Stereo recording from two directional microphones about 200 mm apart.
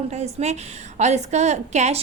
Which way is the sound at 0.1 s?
35° right (ahead or behind).